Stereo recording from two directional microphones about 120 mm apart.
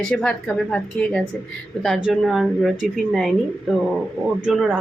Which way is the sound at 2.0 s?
5° right (ahead or behind).